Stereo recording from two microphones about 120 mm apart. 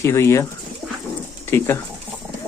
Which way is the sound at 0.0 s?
25° left (ahead or behind).